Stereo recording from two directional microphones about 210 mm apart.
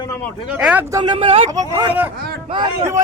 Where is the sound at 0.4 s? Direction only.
5° right (ahead or behind); by 1.5 s 25° right (ahead or behind).